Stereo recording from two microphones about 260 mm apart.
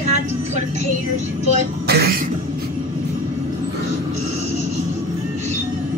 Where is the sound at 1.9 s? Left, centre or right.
Right.